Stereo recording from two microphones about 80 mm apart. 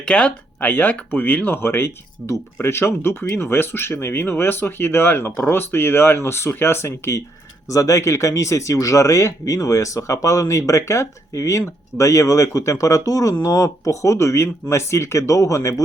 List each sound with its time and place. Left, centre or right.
0.0 s speech: centre; by 15.7 s left